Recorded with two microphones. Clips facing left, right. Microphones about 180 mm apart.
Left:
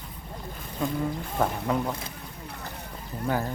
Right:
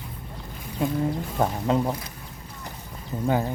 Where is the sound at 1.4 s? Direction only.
25° right (ahead or behind).